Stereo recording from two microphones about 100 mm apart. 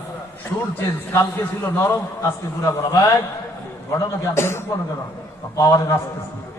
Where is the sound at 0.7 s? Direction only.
25° left (ahead or behind).